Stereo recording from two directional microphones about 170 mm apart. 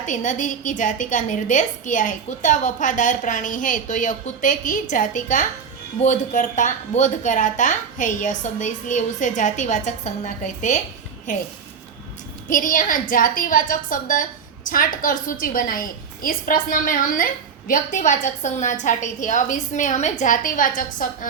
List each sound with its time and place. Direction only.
0.0 s a woman's voice: 45° left (ahead or behind)
12.5 s a woman's voice: 50° left (ahead or behind)